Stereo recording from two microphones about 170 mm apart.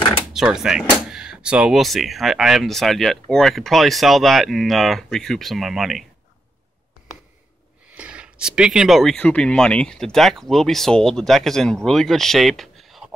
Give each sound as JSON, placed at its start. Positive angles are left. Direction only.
{"t": 0.2, "sound": "speech", "side_deg": -5}
{"t": 7.9, "sound": "speech", "side_deg": -5}